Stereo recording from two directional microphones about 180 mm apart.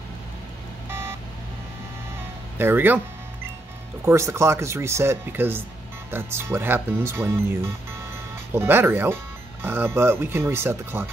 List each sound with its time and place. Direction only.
0.8 s a sound: 15° right (ahead or behind)
2.5 s speech: 10° right (ahead or behind)
4.0 s speech: 15° right (ahead or behind)